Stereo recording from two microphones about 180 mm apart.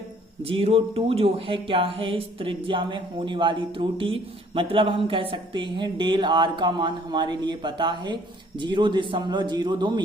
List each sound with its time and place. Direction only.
0.4 s speech: 30° right (ahead or behind)